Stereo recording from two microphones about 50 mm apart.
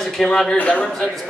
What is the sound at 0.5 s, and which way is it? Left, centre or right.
Speech, left.